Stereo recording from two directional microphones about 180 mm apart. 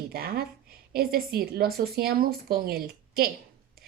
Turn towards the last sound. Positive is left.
turn(degrees=-55)  # may be behind; listen again after turning